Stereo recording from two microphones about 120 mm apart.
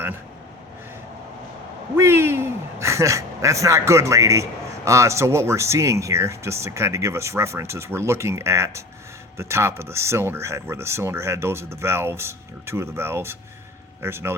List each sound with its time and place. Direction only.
2.0 s speech: 20° right (ahead or behind)